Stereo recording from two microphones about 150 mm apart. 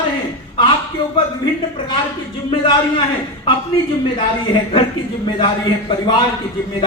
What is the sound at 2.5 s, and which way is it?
A man's voice, 35° left (ahead or behind).